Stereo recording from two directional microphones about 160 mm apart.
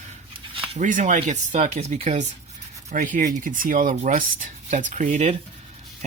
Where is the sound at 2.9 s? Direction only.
55° right (ahead or behind).